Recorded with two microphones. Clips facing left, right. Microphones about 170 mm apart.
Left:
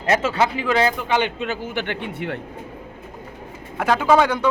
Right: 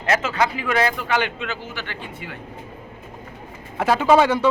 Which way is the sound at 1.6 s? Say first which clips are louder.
Left 7 dB; 60° left (ahead or behind).